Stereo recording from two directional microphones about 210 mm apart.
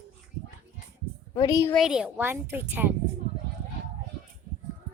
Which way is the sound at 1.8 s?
5° right (ahead or behind).